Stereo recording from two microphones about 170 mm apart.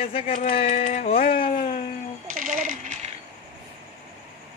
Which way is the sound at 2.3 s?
50° right (ahead or behind).